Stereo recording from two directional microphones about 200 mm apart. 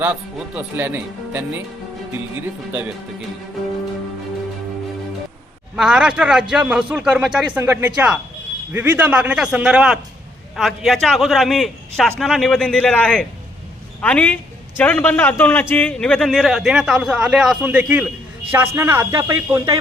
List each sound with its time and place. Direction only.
0.0 s speech: 10° right (ahead or behind)
5.7 s a man's voice: 5° right (ahead or behind)